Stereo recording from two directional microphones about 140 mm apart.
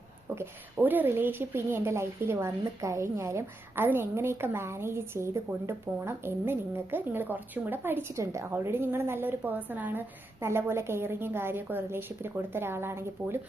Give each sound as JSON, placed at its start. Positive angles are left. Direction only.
{"t": 0.3, "sound": "a woman's voice", "side_deg": -15}